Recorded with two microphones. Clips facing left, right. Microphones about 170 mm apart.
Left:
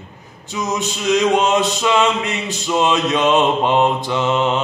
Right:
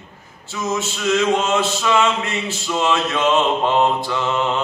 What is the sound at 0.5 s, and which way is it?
Male singing, 15° left (ahead or behind).